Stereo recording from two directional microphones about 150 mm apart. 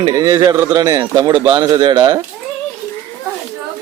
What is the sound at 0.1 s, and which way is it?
Speech, 25° right (ahead or behind).